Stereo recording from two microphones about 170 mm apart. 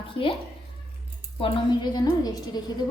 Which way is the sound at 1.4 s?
30° left (ahead or behind).